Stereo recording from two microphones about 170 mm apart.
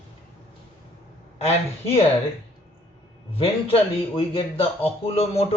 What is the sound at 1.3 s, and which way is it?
Speech, 35° left (ahead or behind).